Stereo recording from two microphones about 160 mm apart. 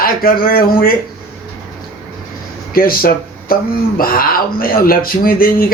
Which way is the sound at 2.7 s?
65° left (ahead or behind).